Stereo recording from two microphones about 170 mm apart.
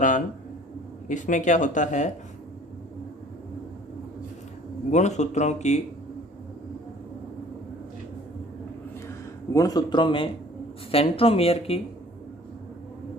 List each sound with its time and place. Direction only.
1.0 s speech: 50° left (ahead or behind)
4.9 s speech: 45° left (ahead or behind)
9.5 s speech: 20° left (ahead or behind)